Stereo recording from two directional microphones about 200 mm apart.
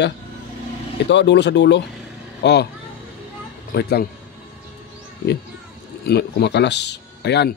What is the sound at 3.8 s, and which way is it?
Speech, 55° left (ahead or behind).